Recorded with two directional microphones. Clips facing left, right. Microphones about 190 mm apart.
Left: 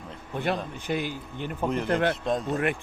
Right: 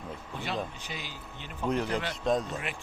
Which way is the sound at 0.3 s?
55° left (ahead or behind).